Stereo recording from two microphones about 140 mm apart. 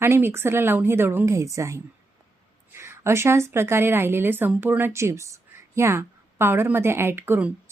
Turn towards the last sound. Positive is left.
turn(degrees=-15)  # may be behind; listen again after turning